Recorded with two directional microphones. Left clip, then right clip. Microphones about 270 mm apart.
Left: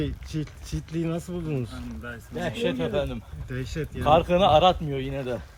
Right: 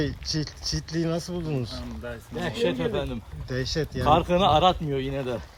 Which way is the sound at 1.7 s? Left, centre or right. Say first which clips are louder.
Right 2 dB; right.